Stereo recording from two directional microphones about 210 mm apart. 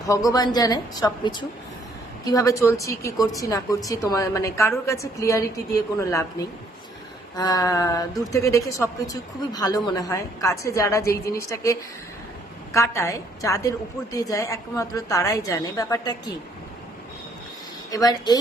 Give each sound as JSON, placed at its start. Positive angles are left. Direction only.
{"t": 0.1, "sound": "speech", "side_deg": 15}
{"t": 7.3, "sound": "speech", "side_deg": 15}
{"t": 17.9, "sound": "speech", "side_deg": 20}